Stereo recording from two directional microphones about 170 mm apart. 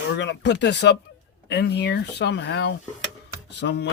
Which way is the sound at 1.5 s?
80° left.